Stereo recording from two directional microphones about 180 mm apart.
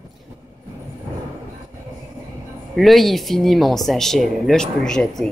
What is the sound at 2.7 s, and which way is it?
Speech, centre (ahead or behind).